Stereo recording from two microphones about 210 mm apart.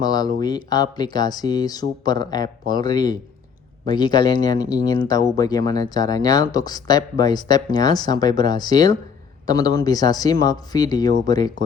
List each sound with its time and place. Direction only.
0.0 s speech: 20° left (ahead or behind)